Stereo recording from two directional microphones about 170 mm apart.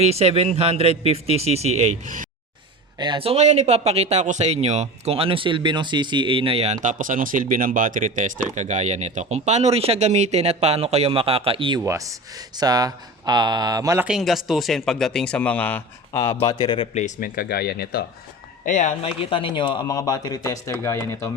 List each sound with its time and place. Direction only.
0.0 s speech: 35° right (ahead or behind)
3.0 s speech: 30° right (ahead or behind)
11.8 s speech: 20° right (ahead or behind)
14.0 s speech: centre (ahead or behind)
16.2 s a man's voice: 20° left (ahead or behind); by 18.0 s 65° left (ahead or behind)
18.6 s speech: 50° left (ahead or behind); by 21.2 s 15° left (ahead or behind)